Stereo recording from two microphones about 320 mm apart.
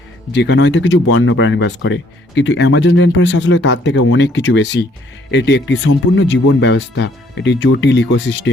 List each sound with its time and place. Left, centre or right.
0.3 s speech: left